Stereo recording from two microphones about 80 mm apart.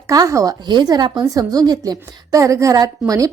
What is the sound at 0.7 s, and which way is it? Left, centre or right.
Speech, right.